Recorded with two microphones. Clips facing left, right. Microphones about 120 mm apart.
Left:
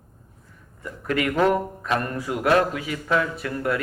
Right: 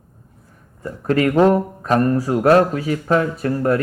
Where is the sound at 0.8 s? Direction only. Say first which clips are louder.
Right 7 dB; 35° right (ahead or behind).